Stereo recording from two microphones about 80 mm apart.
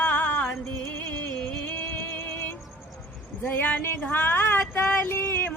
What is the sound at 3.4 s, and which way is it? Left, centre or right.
Speech, left.